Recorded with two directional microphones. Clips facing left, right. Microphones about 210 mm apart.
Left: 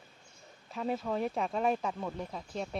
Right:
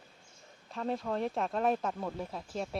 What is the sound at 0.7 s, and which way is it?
Speech, 5° left (ahead or behind).